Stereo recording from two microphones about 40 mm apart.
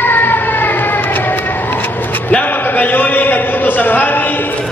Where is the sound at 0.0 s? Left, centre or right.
Left.